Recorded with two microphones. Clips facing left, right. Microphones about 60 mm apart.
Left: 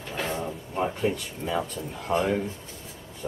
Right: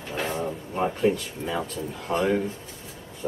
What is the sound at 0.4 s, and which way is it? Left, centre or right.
Speech, centre.